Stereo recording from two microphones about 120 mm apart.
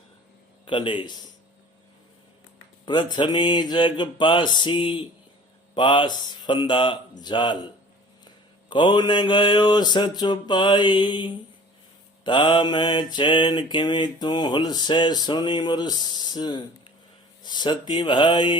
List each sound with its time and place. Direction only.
0.6 s a man's voice: 45° left (ahead or behind)
2.8 s mantra: 40° left (ahead or behind)
8.7 s mantra: 40° left (ahead or behind)